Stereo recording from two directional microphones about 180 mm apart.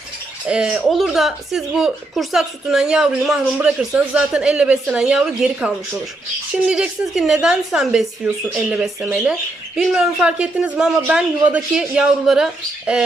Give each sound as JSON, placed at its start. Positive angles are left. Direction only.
{"t": 0.4, "sound": "speech", "side_deg": -5}